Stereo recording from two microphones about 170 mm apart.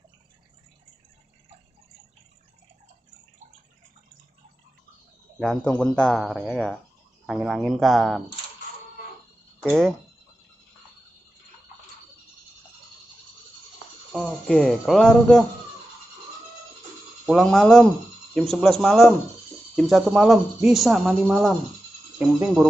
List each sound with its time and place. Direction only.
5.4 s speech: 5° left (ahead or behind)
14.1 s speech: 5° left (ahead or behind)
17.3 s speech: centre (ahead or behind)